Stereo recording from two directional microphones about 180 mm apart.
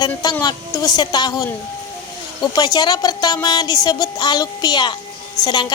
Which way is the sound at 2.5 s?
20° left (ahead or behind).